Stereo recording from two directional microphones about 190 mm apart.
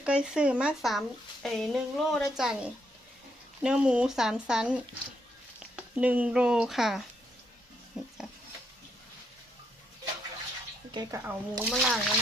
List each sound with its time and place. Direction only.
0.0 s speech: 5° right (ahead or behind)
10.9 s speech: 20° right (ahead or behind)
11.7 s speech: centre (ahead or behind)